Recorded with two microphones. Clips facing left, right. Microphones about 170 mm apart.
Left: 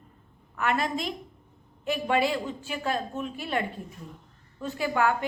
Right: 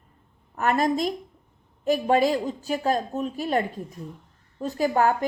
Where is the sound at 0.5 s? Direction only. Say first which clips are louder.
Right 5 dB; 40° right (ahead or behind).